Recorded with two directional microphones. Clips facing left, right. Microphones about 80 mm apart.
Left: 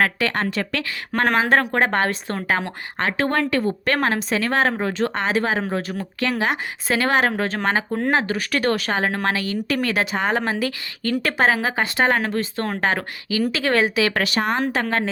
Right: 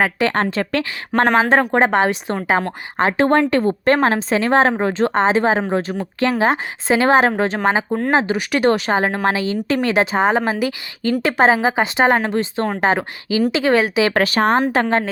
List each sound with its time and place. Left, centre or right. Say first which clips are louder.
0.0 s speech: right 3 dB; right
14.1 s speech: right 6 dB; right
14.7 s speech: right 5 dB; right